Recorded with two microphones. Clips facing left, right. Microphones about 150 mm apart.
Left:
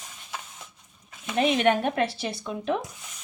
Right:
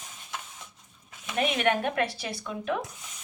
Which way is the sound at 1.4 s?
30° left (ahead or behind).